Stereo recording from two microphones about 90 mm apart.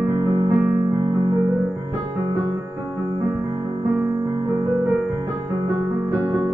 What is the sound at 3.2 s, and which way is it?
Music, 40° right (ahead or behind).